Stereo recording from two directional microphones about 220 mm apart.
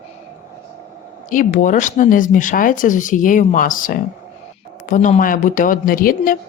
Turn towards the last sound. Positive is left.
turn(degrees=40)  # may be behind; listen again after turning